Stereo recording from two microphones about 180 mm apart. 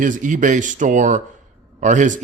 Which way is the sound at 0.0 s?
45° right (ahead or behind).